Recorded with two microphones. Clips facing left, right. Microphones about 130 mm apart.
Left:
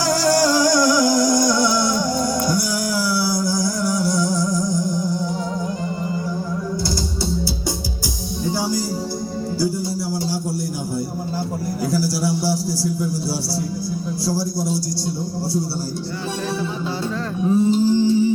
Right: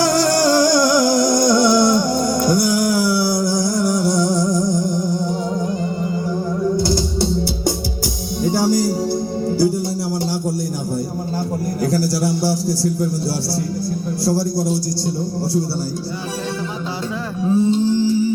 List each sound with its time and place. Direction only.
0.0 s music: 55° right (ahead or behind)
6.8 s music: 55° right (ahead or behind)
11.8 s a sound: 50° right (ahead or behind)
14.3 s a man's voice: 55° right (ahead or behind)
17.4 s music: centre (ahead or behind)
17.9 s music: 20° left (ahead or behind)